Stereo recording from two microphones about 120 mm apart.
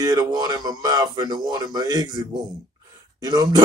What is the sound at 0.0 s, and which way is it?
Speech, 30° right (ahead or behind).